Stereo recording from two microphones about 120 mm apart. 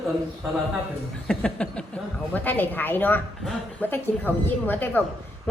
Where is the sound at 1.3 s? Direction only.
10° left (ahead or behind).